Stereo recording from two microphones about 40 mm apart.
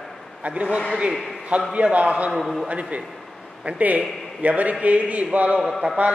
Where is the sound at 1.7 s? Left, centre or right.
Right.